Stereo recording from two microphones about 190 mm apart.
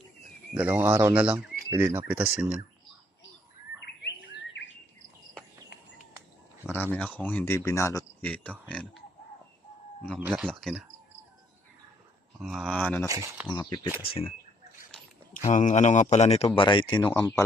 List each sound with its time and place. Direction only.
0.5 s speech: 10° right (ahead or behind)
4.0 s bird: 65° left (ahead or behind)
6.9 s speech: 10° left (ahead or behind)
10.2 s speech: 10° right (ahead or behind)
10.5 s speech: centre (ahead or behind)
12.4 s speech: 5° right (ahead or behind)
13.1 s speech: 15° right (ahead or behind)
13.5 s speech: 20° left (ahead or behind)
15.4 s speech: 40° left (ahead or behind); by 17.4 s 20° left (ahead or behind)